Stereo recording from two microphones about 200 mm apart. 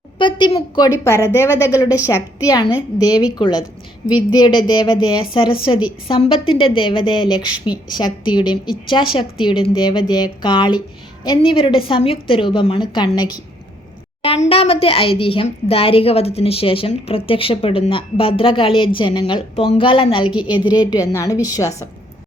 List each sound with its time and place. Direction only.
0.2 s a woman's voice: 25° left (ahead or behind)
14.5 s a woman's voice: 30° left (ahead or behind)